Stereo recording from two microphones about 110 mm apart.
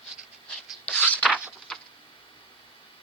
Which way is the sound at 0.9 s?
15° left (ahead or behind).